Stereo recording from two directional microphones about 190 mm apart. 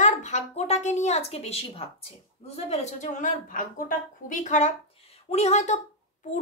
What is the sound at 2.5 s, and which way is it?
A child's voice, 35° left (ahead or behind).